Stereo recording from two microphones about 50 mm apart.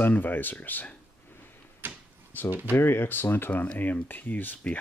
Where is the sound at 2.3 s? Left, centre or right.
Left.